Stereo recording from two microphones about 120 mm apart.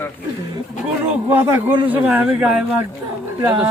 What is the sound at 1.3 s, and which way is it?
A man's voice, 20° right (ahead or behind).